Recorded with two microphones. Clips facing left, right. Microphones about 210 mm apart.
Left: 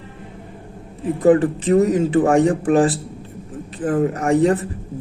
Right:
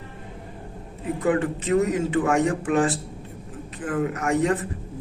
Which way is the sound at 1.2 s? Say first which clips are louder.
Left 9 dB; 35° left (ahead or behind).